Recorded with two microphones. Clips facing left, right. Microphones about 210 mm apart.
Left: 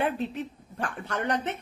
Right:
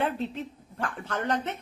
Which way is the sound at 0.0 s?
15° left (ahead or behind).